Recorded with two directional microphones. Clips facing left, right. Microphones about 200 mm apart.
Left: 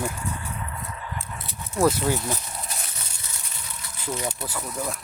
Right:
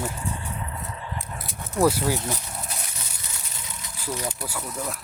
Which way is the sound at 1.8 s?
10° right (ahead or behind).